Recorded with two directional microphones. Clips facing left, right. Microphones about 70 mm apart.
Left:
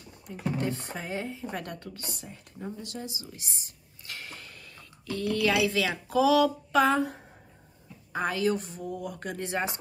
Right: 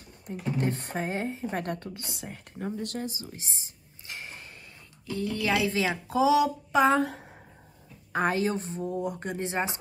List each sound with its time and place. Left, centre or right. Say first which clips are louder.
0.3 s speech: right 1 dB; right
2.2 s speech: right 7 dB; right; by 6.9 s centre
8.1 s speech: right 1 dB; right